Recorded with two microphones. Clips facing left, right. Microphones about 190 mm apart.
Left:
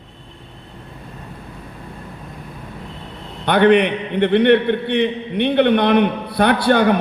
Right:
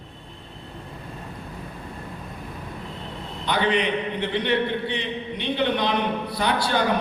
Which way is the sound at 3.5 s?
60° left (ahead or behind).